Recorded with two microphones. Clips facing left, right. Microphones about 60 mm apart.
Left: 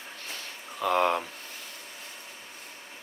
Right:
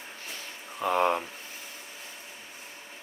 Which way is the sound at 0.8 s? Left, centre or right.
Left.